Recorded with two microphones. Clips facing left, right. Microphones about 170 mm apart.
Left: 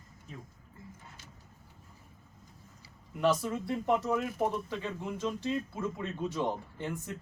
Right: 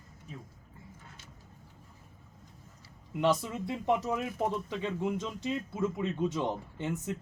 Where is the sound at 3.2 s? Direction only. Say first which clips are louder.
Even; 20° right (ahead or behind).